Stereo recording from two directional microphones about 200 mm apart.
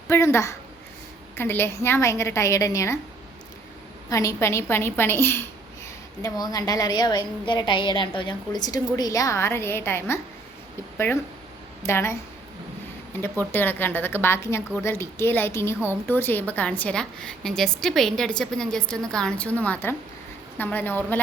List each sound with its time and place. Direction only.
0.1 s a woman's voice: 15° left (ahead or behind)
4.1 s a woman's voice: 15° left (ahead or behind)
13.2 s a woman's voice: 10° left (ahead or behind)